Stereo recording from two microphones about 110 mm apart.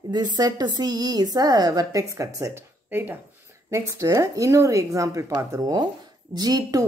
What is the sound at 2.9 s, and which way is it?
Speech, 15° right (ahead or behind).